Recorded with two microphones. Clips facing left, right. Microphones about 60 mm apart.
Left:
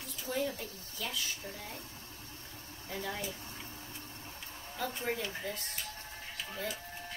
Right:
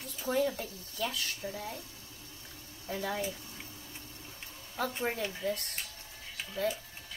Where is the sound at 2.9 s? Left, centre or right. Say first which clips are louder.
Right 4 dB; right.